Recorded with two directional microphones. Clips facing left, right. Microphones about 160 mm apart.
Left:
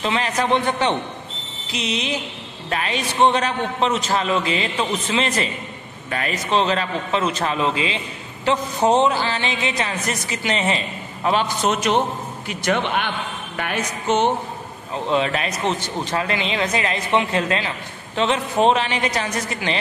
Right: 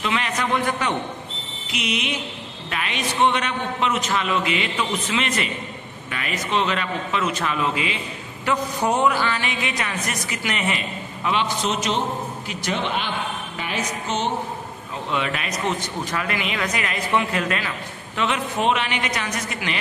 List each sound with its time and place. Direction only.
0.0 s a man's voice: 35° left (ahead or behind)
11.2 s a man's voice: 45° left (ahead or behind)
13.6 s music: 55° left (ahead or behind)
15.0 s speech: 30° left (ahead or behind)